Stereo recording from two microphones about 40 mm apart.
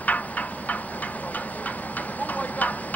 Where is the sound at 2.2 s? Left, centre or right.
Left.